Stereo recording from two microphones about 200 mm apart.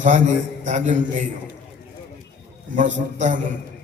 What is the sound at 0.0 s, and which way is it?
Speech, 40° right (ahead or behind).